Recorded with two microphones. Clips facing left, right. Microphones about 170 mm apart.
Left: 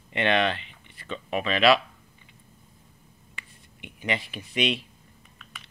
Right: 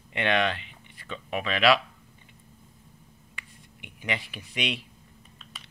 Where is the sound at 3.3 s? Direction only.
10° right (ahead or behind).